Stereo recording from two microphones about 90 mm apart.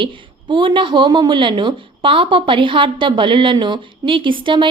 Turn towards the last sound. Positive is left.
turn(degrees=-65)  # may be behind; listen again after turning